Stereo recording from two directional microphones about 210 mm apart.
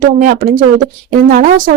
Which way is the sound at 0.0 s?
40° right (ahead or behind).